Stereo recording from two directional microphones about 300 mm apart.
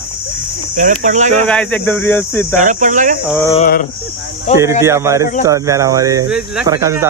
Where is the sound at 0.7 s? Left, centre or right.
Right.